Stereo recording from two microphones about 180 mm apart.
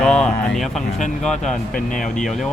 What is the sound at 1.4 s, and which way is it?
Speech, 45° left (ahead or behind).